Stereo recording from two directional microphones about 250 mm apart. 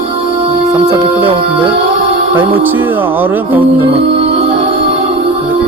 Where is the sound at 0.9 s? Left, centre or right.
Right.